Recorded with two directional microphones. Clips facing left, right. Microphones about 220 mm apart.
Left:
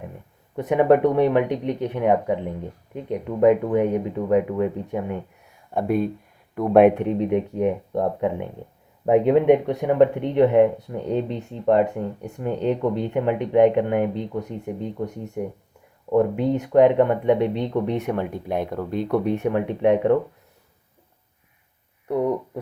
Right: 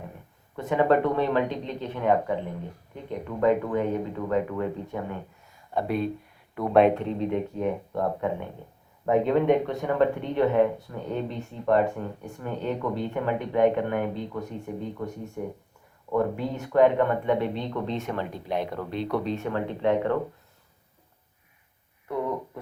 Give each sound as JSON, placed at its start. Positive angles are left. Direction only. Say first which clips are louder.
{"t": 0.7, "sound": "speech", "louder": "left 5 dB", "side_deg": 15}
{"t": 5.5, "sound": "a sound", "louder": "left 5 dB", "side_deg": 50}
{"t": 6.9, "sound": "speech", "louder": "left 5 dB", "side_deg": 15}
{"t": 18.4, "sound": "speech", "louder": "left 4 dB", "side_deg": 50}
{"t": 19.4, "sound": "speech", "louder": "left 6 dB", "side_deg": 15}